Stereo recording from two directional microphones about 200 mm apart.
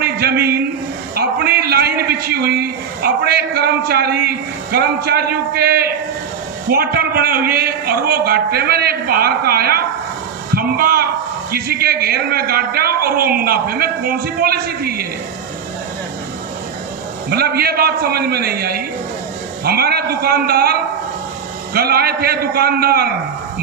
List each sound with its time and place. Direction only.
0.0 s a man's voice: 50° right (ahead or behind)
17.2 s a man's voice: 50° right (ahead or behind)